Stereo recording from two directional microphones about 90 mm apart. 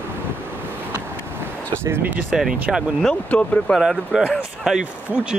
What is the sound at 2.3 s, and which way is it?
Speech, 5° right (ahead or behind).